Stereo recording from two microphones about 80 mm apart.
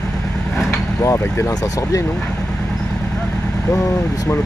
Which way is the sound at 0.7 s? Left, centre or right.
Left.